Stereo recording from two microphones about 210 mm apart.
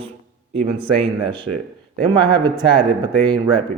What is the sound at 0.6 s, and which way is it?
Speech, 25° right (ahead or behind).